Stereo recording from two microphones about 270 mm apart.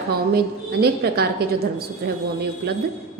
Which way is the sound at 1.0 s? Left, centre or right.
Right.